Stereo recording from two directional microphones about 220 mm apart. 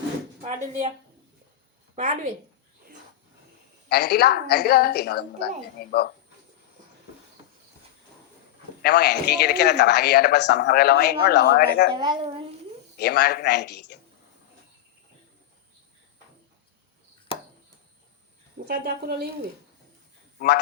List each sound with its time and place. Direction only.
0.4 s speech: 30° right (ahead or behind)
2.0 s a woman's voice: 35° right (ahead or behind)
3.8 s speech: 45° left (ahead or behind)
8.8 s speech: 45° left (ahead or behind)
11.9 s a child's voice: 20° right (ahead or behind)
13.0 s speech: 45° left (ahead or behind)
18.7 s a woman's voice: 45° right (ahead or behind)